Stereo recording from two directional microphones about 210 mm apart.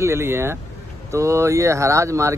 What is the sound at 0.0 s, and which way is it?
Speech, 10° right (ahead or behind).